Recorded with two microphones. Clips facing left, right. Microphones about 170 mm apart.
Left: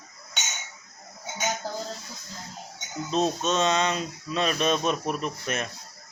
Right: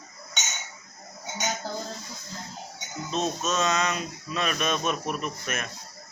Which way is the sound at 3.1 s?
35° left (ahead or behind).